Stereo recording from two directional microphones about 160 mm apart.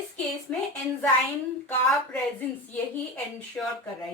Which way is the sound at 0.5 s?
10° left (ahead or behind).